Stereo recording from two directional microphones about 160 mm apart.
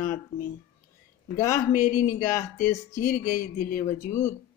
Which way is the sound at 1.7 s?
60° left (ahead or behind).